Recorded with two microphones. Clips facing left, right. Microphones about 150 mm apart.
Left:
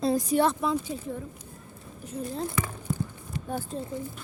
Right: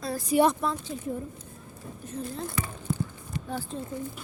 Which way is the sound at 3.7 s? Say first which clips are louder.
Left 1 dB; 40° left (ahead or behind).